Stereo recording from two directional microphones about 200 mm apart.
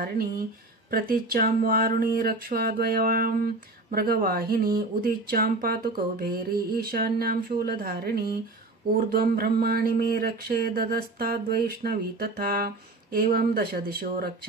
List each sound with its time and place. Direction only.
0.8 s speech: 45° right (ahead or behind)